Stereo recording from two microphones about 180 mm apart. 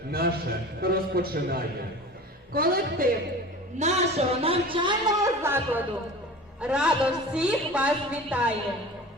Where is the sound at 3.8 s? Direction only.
35° right (ahead or behind).